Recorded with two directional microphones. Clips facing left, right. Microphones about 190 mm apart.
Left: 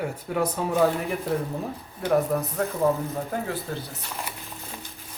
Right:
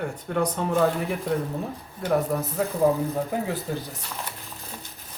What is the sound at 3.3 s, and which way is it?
Speech, 15° right (ahead or behind).